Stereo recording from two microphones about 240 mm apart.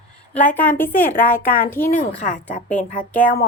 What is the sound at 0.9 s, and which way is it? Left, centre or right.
Speech, left.